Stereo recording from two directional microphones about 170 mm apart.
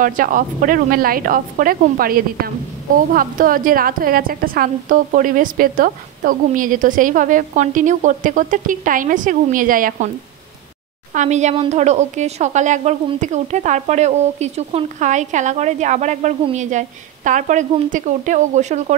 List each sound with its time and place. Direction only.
0.0 s a woman's voice: 55° right (ahead or behind)
11.1 s a woman's voice: 40° right (ahead or behind)